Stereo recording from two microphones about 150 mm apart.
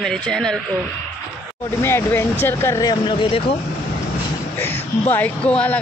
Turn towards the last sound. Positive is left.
turn(degrees=10)  # may be behind; listen again after turning